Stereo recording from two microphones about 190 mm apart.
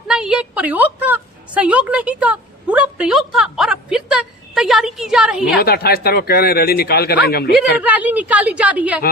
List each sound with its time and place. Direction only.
0.1 s a woman's voice: 5° right (ahead or behind)
5.5 s speech: 55° left (ahead or behind)
7.8 s a woman's voice: 10° right (ahead or behind)